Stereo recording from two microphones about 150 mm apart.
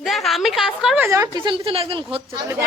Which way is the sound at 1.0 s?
20° right (ahead or behind).